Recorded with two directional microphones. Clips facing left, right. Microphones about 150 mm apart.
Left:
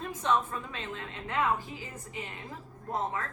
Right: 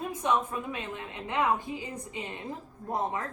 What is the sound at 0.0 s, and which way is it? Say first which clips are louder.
A woman's voice: right 1 dB; 10° right (ahead or behind).